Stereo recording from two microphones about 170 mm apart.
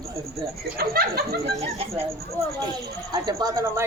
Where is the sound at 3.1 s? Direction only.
25° right (ahead or behind).